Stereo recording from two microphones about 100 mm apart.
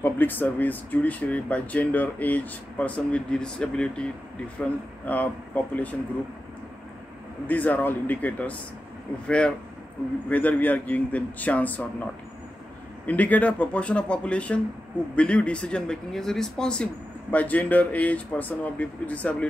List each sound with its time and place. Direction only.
0.0 s speech: 20° left (ahead or behind)
7.4 s speech: 15° left (ahead or behind)
10.3 s speech: 15° left (ahead or behind)
13.0 s speech: 15° left (ahead or behind)